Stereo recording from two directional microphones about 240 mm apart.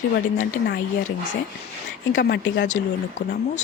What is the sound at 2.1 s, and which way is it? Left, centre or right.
Speech, left.